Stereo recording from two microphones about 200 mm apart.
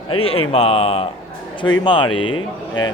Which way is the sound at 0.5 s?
30° left (ahead or behind).